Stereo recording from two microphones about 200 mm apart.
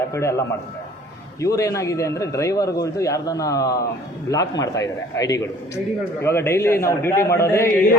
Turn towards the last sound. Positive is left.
turn(degrees=15)  # may be behind; listen again after turning